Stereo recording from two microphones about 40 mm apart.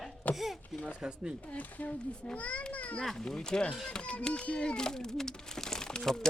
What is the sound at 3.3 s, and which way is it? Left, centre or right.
Speech, centre.